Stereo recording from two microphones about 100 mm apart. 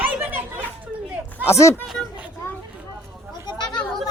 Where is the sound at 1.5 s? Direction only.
30° left (ahead or behind).